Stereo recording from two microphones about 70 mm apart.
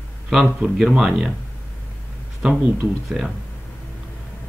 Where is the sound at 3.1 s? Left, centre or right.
Centre.